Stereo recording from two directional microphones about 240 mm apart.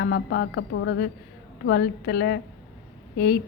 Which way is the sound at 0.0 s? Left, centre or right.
Left.